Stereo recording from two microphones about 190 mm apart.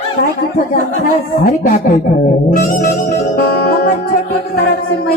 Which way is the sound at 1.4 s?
40° left (ahead or behind).